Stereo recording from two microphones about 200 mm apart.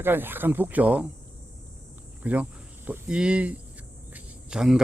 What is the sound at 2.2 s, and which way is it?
Speech, 5° right (ahead or behind).